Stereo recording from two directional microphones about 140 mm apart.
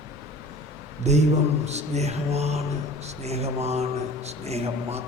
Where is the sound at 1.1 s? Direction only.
55° right (ahead or behind).